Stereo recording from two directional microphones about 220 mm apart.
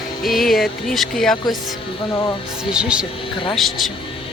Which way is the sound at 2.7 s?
5° right (ahead or behind).